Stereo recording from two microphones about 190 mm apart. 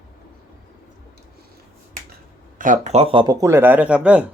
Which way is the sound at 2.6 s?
45° right (ahead or behind).